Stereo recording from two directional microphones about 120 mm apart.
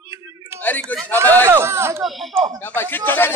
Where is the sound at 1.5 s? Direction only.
20° right (ahead or behind).